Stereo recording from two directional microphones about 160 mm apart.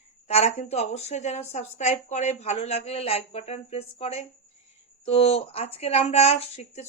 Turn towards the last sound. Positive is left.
turn(degrees=45)  # may be behind; listen again after turning